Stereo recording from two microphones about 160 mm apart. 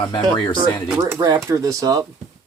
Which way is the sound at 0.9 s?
20° right (ahead or behind).